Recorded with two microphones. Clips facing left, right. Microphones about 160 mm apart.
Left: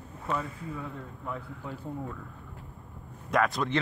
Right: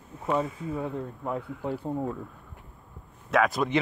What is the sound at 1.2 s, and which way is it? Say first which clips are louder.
Speech: right 6 dB; 40° right (ahead or behind).